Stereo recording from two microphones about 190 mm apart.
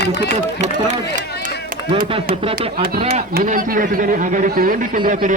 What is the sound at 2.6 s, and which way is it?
A man's voice, 50° right (ahead or behind).